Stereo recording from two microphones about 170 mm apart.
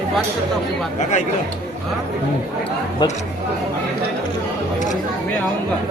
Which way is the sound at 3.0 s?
25° left (ahead or behind).